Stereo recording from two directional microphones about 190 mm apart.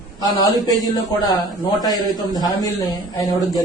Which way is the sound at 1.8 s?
20° left (ahead or behind).